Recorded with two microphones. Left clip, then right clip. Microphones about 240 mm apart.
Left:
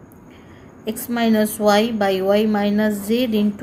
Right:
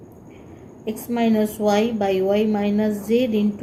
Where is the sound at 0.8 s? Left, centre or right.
Left.